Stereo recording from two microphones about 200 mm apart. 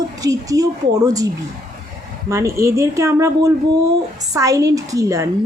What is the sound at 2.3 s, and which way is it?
A woman's voice, 15° right (ahead or behind).